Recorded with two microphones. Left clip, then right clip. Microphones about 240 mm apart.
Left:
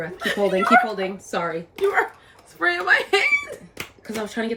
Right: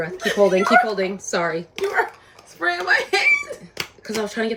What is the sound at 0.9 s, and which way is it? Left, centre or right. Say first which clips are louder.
Speech: right 3 dB; right.